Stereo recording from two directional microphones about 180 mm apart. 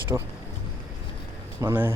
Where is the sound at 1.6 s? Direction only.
10° right (ahead or behind).